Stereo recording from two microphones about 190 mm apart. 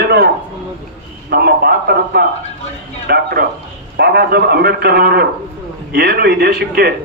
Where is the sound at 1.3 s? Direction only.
55° right (ahead or behind).